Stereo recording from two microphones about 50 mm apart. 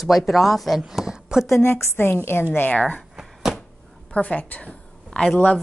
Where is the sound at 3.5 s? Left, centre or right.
Centre.